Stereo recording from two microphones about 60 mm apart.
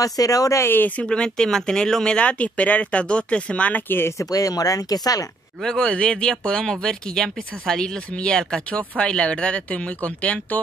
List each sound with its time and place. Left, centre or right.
0.0 s speech: left
0.6 s speech: left
1.0 s speech: centre
4.2 s speech: left
5.6 s speech: centre